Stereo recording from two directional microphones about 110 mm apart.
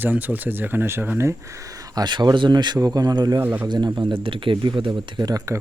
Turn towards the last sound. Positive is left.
turn(degrees=-35)  # may be behind; listen again after turning